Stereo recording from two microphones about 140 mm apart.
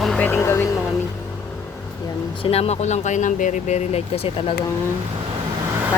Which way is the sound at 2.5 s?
45° left (ahead or behind).